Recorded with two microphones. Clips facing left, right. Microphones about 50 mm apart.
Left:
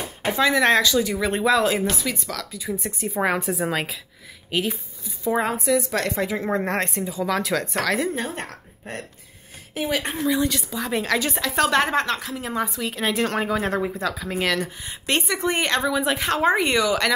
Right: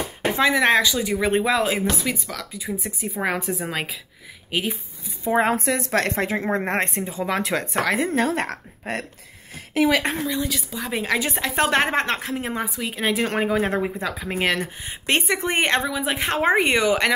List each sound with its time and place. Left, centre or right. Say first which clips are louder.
0.4 s speech: even; centre
4.5 s speech: left 1 dB; centre
5.2 s speech: right 2 dB; right
5.5 s a woman's voice: even; right
8.1 s a woman's voice: right 6 dB; right
10.2 s a woman's voice: left 4 dB; centre; by 12.5 s right
12.5 s a woman's voice: left 1 dB; centre